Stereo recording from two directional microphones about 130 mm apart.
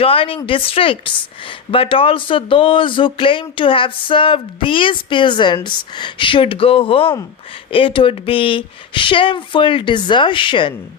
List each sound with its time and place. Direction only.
0.0 s speech: 45° left (ahead or behind)